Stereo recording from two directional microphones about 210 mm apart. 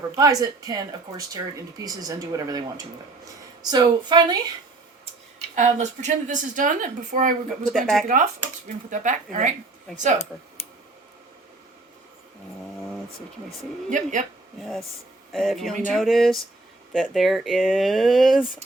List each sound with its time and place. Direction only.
0.2 s a woman's voice: 15° right (ahead or behind)
5.5 s a woman's voice: 35° right (ahead or behind)
7.7 s speech: centre (ahead or behind)
8.0 s a woman's voice: 35° right (ahead or behind)
13.9 s a woman's voice: 35° right (ahead or behind)
14.6 s speech: centre (ahead or behind)